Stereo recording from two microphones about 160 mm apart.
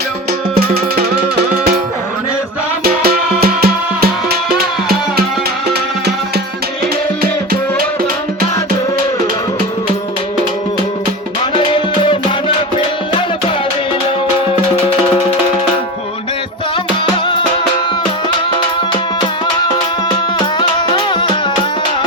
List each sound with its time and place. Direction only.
0.5 s music: 75° right (ahead or behind)
2.8 s music: 70° right (ahead or behind)
5.6 s music: 85° right
11.7 s music: 30° left (ahead or behind)